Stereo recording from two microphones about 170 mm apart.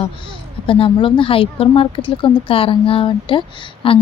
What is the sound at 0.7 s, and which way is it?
A woman's voice, 30° left (ahead or behind).